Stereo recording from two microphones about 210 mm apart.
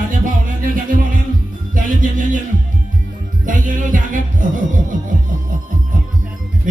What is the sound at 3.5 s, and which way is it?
Music, 40° right (ahead or behind).